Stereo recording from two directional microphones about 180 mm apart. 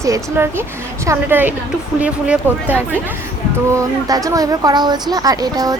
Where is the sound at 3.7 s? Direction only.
20° right (ahead or behind).